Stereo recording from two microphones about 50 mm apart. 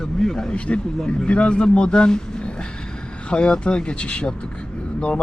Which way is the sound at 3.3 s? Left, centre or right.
Centre.